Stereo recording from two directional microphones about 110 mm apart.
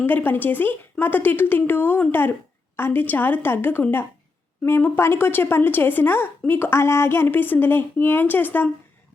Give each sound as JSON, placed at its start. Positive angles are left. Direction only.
{"t": 0.0, "sound": "speech", "side_deg": 20}